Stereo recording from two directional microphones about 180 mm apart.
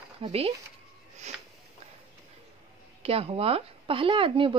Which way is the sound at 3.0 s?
35° right (ahead or behind).